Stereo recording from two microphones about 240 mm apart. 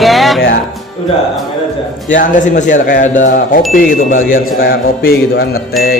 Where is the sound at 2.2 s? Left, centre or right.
Left.